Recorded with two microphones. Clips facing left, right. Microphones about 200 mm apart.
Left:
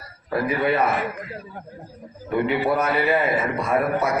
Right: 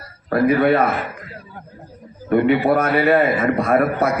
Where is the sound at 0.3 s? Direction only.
65° right (ahead or behind).